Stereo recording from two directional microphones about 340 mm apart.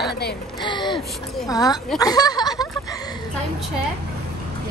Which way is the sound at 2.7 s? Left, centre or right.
Centre.